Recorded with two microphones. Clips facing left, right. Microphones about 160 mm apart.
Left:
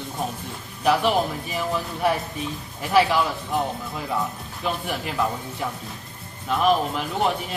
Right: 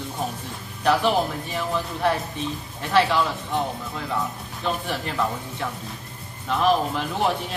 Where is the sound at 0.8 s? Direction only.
Centre (ahead or behind).